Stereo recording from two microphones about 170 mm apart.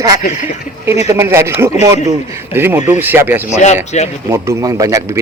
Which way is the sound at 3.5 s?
40° left (ahead or behind).